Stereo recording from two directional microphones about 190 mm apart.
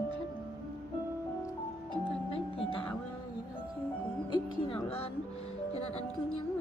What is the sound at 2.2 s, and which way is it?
Music, 30° left (ahead or behind).